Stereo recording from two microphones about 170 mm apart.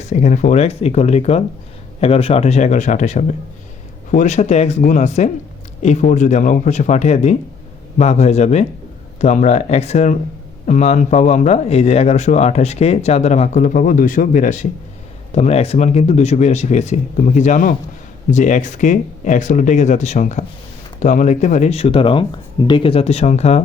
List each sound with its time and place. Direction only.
0.0 s speech: 40° left (ahead or behind)